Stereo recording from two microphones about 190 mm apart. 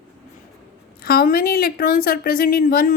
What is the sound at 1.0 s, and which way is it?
Speech, 50° left (ahead or behind).